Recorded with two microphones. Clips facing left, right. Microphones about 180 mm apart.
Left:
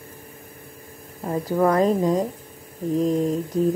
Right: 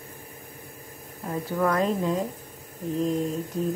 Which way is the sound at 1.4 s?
35° left (ahead or behind).